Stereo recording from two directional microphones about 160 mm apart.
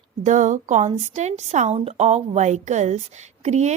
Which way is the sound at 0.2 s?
50° right (ahead or behind).